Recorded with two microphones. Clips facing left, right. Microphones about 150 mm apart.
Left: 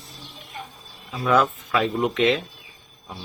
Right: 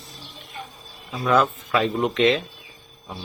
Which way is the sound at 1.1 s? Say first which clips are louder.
Even; 5° left (ahead or behind).